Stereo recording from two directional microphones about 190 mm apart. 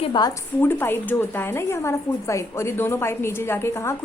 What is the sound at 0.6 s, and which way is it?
A woman's voice, 10° left (ahead or behind).